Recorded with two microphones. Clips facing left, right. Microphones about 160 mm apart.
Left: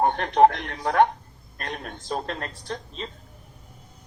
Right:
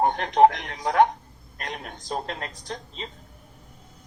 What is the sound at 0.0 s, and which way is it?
Speech, 15° right (ahead or behind).